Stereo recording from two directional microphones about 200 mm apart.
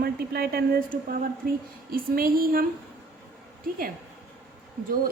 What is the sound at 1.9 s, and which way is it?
Speech, 45° right (ahead or behind).